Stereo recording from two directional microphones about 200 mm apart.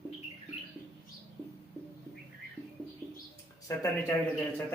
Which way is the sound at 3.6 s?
15° left (ahead or behind).